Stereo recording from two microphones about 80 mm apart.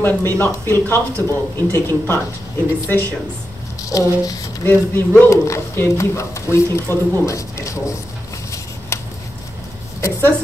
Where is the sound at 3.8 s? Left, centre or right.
Left.